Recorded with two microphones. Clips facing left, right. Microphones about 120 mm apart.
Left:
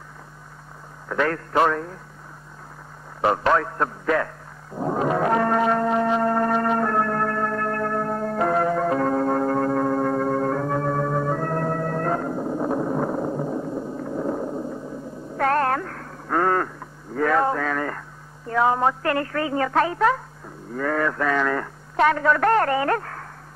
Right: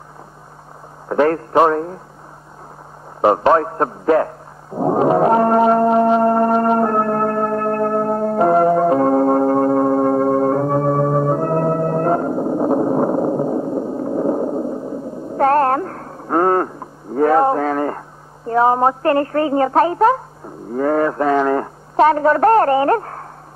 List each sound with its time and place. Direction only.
1.0 s speech: 35° right (ahead or behind)
3.2 s a sound: 30° right (ahead or behind)
18.5 s a woman's voice: 35° right (ahead or behind)